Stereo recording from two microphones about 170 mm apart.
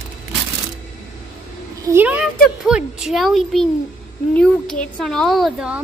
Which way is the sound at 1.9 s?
10° right (ahead or behind).